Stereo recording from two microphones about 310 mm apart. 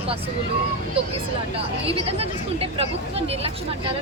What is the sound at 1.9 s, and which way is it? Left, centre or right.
Speech, centre.